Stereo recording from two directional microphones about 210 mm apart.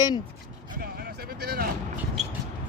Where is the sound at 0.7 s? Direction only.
45° right (ahead or behind).